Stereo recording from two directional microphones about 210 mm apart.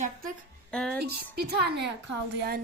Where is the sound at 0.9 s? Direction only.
50° right (ahead or behind).